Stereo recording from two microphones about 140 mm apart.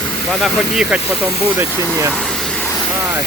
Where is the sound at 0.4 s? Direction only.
5° right (ahead or behind).